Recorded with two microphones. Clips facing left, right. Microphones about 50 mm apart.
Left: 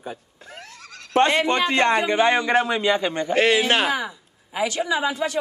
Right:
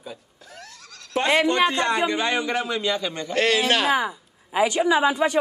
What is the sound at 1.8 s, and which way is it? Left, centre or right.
A man's voice, left.